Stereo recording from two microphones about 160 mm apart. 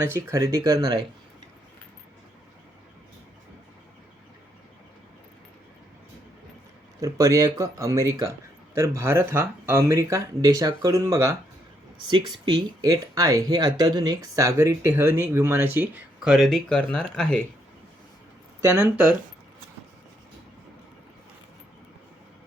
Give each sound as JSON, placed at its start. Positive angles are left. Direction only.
{"t": 0.3, "sound": "speech", "side_deg": -20}
{"t": 7.0, "sound": "speech", "side_deg": -20}
{"t": 11.9, "sound": "speech", "side_deg": -30}
{"t": 16.3, "sound": "speech", "side_deg": 0}
{"t": 18.6, "sound": "speech", "side_deg": -15}